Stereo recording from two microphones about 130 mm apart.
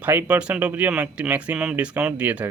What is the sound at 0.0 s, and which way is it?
Speech, 15° right (ahead or behind).